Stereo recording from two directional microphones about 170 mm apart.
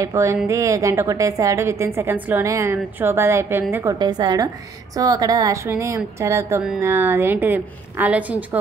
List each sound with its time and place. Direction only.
0.0 s a woman's voice: 20° right (ahead or behind)